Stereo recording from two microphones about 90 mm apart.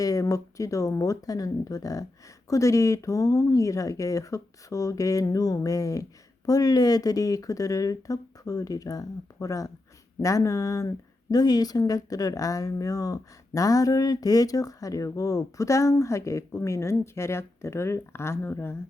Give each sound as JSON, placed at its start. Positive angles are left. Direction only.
{"t": 0.0, "sound": "speech", "side_deg": 40}